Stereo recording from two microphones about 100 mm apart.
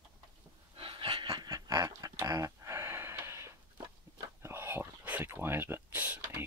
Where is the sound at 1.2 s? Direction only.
40° right (ahead or behind).